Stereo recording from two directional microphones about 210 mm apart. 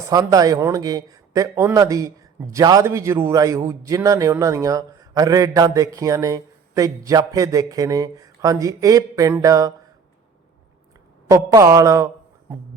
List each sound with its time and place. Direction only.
0.1 s a man's voice: 15° right (ahead or behind)
11.3 s a man's voice: 15° right (ahead or behind)